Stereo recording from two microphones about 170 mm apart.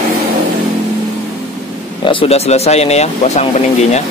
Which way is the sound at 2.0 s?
30° left (ahead or behind).